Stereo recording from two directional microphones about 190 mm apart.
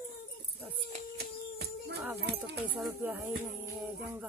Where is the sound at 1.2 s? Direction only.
60° right (ahead or behind).